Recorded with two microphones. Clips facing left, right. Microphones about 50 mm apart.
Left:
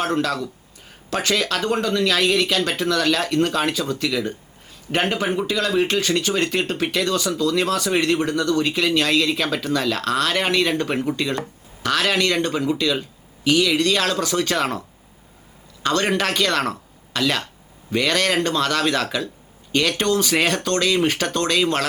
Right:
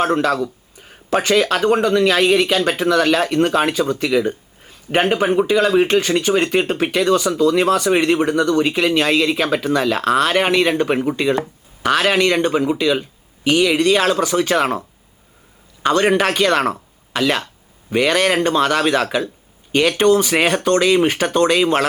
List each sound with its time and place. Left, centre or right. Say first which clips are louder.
0.0 s speech: right 5 dB; centre